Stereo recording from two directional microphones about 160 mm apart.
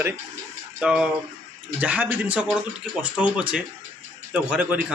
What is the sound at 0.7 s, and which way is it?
Speech, 5° right (ahead or behind).